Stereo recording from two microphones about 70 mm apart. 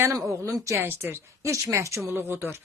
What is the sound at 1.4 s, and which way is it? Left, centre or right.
Speech, right.